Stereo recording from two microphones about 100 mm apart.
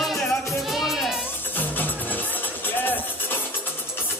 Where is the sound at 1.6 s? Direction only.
20° left (ahead or behind).